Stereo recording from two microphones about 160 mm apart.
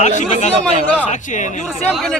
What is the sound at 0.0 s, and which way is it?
Speech, 50° left (ahead or behind).